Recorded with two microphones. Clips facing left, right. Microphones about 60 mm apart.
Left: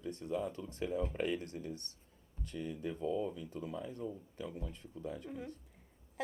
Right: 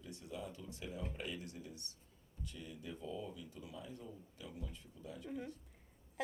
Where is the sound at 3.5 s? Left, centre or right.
Left.